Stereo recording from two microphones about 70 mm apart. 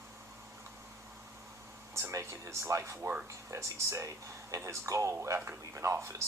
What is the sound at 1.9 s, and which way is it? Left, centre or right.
Speech, right.